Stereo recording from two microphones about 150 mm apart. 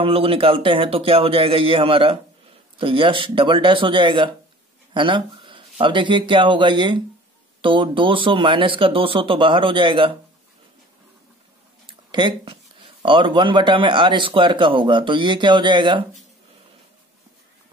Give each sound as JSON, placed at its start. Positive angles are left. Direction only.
{"t": 0.0, "sound": "speech", "side_deg": -40}
{"t": 12.1, "sound": "speech", "side_deg": -30}